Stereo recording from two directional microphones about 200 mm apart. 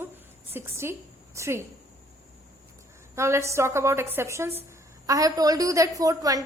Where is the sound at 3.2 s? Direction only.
15° right (ahead or behind).